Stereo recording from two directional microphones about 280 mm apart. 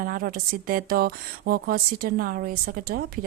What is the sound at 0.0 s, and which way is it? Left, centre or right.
Speech, right.